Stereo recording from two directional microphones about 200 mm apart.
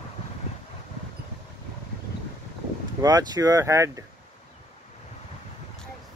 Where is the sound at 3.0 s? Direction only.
20° right (ahead or behind).